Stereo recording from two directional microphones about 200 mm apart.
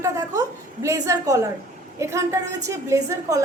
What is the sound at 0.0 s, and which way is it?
A woman's voice, 15° right (ahead or behind).